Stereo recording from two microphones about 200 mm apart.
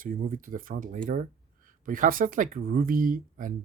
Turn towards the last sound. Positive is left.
turn(degrees=-45)  # may be behind; listen again after turning